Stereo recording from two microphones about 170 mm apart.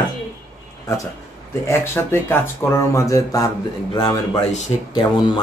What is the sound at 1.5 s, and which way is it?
Speech, 15° left (ahead or behind).